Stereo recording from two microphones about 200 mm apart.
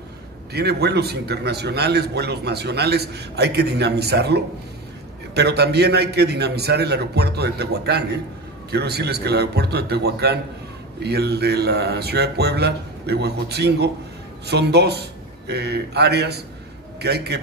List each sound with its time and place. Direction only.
0.5 s a man's voice: 55° right (ahead or behind)